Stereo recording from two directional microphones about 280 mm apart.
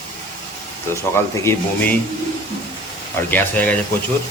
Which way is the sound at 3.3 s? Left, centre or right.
Centre.